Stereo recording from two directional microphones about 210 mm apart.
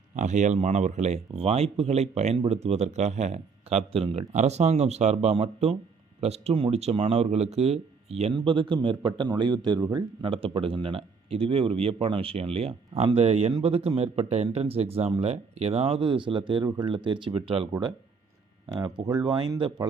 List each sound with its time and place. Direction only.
0.2 s speech: 35° right (ahead or behind)